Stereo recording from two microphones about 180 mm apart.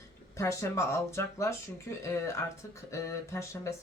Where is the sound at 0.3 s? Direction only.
15° left (ahead or behind).